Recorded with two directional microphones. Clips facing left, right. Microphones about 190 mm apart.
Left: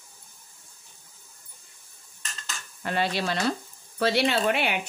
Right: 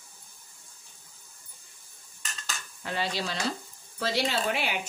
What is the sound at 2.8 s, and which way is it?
Speech, 60° left (ahead or behind).